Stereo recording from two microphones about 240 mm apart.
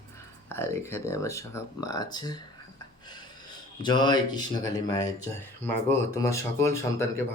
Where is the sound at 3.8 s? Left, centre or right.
Centre.